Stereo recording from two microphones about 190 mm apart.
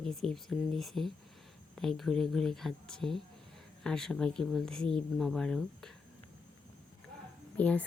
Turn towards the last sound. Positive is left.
turn(degrees=10)  # may be behind; listen again after turning